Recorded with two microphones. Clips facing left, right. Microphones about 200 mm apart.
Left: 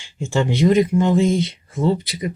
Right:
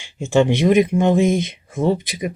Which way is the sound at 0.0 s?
20° right (ahead or behind).